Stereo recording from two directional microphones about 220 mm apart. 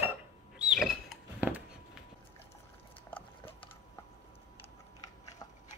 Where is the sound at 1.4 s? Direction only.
10° right (ahead or behind).